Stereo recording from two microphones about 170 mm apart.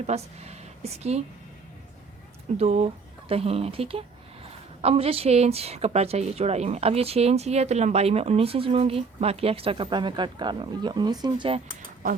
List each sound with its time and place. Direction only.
0.0 s speech: 40° right (ahead or behind)
2.6 s a woman's voice: 40° right (ahead or behind)